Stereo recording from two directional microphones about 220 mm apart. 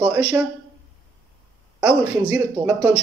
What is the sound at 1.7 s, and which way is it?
Speech, 5° right (ahead or behind).